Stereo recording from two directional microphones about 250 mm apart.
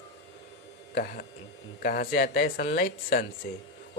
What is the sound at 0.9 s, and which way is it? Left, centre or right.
Speech, left.